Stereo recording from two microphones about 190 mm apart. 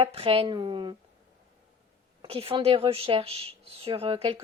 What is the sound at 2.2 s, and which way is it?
A woman's voice, 30° right (ahead or behind).